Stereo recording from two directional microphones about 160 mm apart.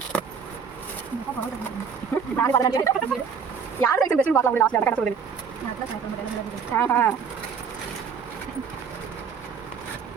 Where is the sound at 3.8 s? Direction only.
10° left (ahead or behind).